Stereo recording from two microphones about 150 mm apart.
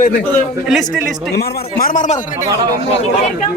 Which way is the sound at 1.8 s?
60° left (ahead or behind).